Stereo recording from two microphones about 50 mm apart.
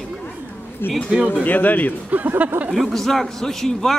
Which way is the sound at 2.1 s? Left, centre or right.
Right.